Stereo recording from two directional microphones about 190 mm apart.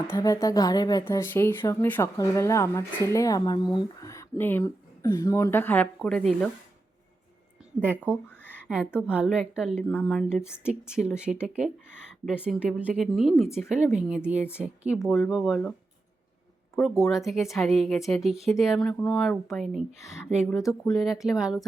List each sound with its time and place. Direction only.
0.1 s speech: 20° left (ahead or behind)
7.8 s speech: 10° right (ahead or behind)
8.4 s a sound: 5° left (ahead or behind)
9.0 s speech: 5° right (ahead or behind)
16.7 s speech: 10° left (ahead or behind)
17.0 s speech: centre (ahead or behind)